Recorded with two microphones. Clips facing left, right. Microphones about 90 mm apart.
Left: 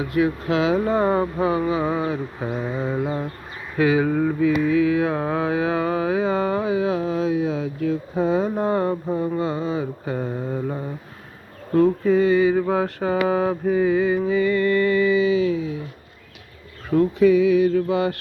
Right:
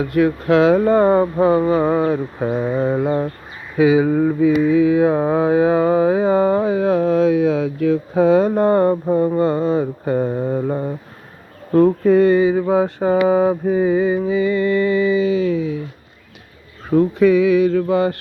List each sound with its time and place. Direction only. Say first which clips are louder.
0.1 s speech: right 6 dB; 55° right (ahead or behind)
1.0 s mantra: right 6 dB; 35° right (ahead or behind)
3.8 s mantra: right 5 dB; 15° right (ahead or behind); by 10.2 s 50° right (ahead or behind)
10.2 s mantra: right 7 dB; 30° right (ahead or behind)
11.7 s speech: right 4 dB; 55° right (ahead or behind)
12.5 s mantra: right 4 dB; 15° right (ahead or behind)
15.2 s mantra: right 2 dB; 45° right (ahead or behind)
15.5 s speech: right 5 dB; 65° right (ahead or behind)
17.2 s a sound: right 2 dB; 65° right (ahead or behind)
17.8 s mantra: right 4 dB; 40° right (ahead or behind)